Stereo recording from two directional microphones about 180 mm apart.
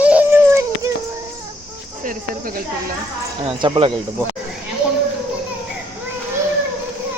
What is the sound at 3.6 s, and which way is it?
Speech, 25° right (ahead or behind).